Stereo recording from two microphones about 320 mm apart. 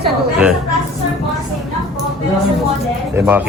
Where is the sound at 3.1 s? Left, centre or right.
Centre.